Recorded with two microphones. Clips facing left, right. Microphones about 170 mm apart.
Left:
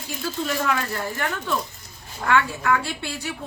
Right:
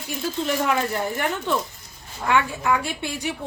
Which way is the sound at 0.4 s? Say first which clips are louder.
Right 2 dB; 20° right (ahead or behind).